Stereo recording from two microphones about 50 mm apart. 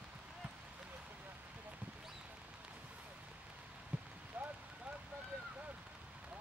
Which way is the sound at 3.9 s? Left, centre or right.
Right.